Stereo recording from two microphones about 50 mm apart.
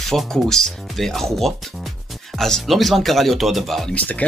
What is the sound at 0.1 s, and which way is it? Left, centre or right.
Speech, centre.